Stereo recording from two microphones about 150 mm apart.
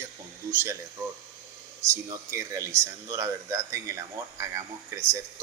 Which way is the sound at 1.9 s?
20° right (ahead or behind).